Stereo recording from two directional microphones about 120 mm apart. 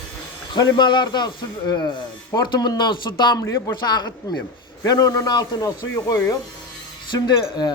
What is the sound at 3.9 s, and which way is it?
Speech, 35° left (ahead or behind).